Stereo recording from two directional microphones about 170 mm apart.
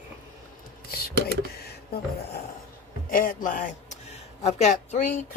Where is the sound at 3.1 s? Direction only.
55° left (ahead or behind).